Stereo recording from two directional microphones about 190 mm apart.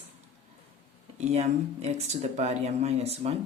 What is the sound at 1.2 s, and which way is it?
Speech, 35° right (ahead or behind).